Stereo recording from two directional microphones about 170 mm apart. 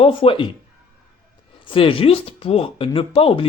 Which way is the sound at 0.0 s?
35° left (ahead or behind).